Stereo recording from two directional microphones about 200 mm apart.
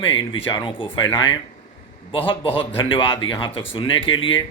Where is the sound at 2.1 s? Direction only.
25° left (ahead or behind).